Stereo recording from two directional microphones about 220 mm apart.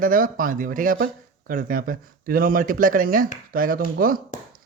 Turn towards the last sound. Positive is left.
turn(degrees=-40)  # may be behind; listen again after turning